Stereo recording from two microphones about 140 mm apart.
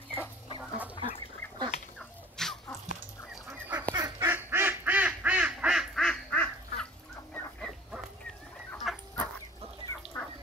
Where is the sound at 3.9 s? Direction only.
20° right (ahead or behind); by 6.9 s 10° left (ahead or behind).